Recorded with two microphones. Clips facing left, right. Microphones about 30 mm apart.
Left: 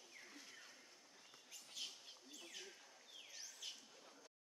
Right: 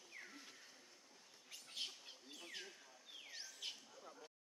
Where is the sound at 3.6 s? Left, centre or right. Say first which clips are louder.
Right 4 dB; right.